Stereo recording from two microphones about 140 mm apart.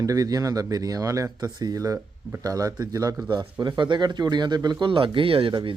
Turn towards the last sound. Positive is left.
turn(degrees=-35)  # may be behind; listen again after turning